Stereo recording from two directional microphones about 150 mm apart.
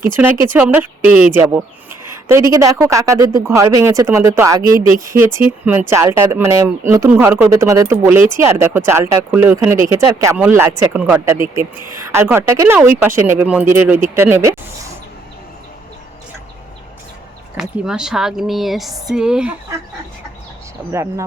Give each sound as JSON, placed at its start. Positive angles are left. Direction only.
{"t": 0.2, "sound": "speech", "side_deg": -15}
{"t": 12.0, "sound": "speech", "side_deg": -15}
{"t": 17.6, "sound": "speech", "side_deg": -5}
{"t": 20.9, "sound": "speech", "side_deg": -20}